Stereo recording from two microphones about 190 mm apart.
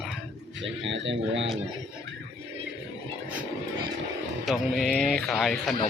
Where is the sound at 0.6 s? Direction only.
75° right (ahead or behind).